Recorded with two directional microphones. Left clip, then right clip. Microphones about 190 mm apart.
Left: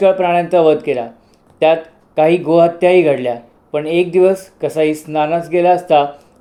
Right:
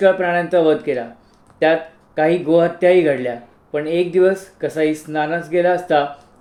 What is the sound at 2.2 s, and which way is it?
Speech, 15° left (ahead or behind).